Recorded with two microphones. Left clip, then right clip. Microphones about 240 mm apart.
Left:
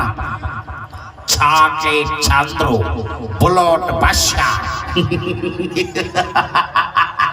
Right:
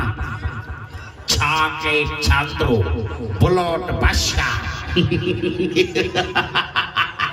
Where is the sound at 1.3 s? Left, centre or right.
Left.